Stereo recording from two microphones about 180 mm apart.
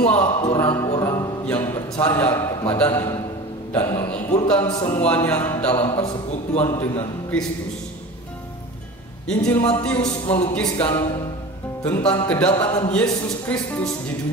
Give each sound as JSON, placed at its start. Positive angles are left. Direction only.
{"t": 0.0, "sound": "speech", "side_deg": 10}
{"t": 0.4, "sound": "speech", "side_deg": 20}
{"t": 0.9, "sound": "a sound", "side_deg": 20}
{"t": 1.4, "sound": "a man's voice", "side_deg": 10}
{"t": 9.3, "sound": "speech", "side_deg": 5}